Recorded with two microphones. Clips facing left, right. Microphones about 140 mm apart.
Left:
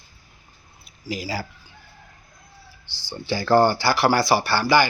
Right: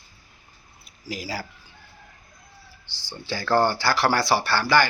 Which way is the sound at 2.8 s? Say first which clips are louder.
Left 1 dB; 20° right (ahead or behind).